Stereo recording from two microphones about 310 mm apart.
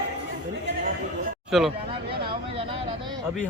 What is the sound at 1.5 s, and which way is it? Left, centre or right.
Speech, centre.